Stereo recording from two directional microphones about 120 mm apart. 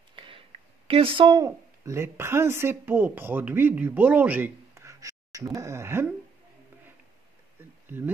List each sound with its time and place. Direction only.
0.1 s a sound: 45° right (ahead or behind)
0.8 s speech: 50° right (ahead or behind)
1.4 s speech: 25° right (ahead or behind)